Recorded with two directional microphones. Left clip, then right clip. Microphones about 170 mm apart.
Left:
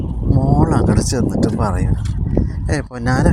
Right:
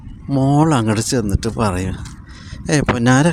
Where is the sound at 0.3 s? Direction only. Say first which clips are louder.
Right 2 dB; 40° right (ahead or behind).